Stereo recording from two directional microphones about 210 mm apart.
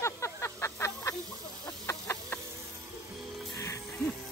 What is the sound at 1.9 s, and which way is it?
Chicken, 10° left (ahead or behind).